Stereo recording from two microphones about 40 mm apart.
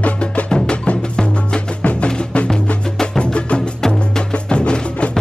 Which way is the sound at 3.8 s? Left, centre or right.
Centre.